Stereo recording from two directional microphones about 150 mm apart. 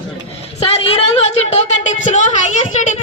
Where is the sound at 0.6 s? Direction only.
40° left (ahead or behind).